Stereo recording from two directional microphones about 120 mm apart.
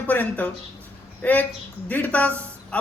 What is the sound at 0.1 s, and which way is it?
Speech, 15° left (ahead or behind).